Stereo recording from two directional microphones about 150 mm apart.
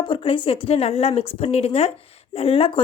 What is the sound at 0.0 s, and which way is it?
A woman's voice, 35° left (ahead or behind).